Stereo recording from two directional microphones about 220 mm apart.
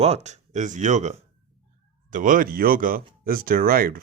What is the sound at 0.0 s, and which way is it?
Speech, 30° right (ahead or behind).